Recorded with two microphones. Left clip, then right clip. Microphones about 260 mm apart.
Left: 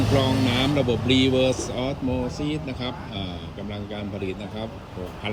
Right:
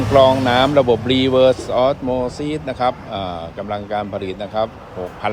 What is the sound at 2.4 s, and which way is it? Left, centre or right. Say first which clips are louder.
Speech: right 10 dB; centre.